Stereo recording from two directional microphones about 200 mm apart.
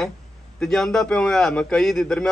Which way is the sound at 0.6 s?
5° left (ahead or behind).